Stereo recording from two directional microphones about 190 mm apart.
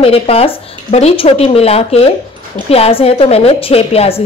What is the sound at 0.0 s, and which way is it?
A woman's voice, 30° left (ahead or behind).